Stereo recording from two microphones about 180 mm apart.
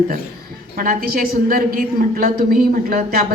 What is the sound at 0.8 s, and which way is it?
A woman's voice, 50° right (ahead or behind).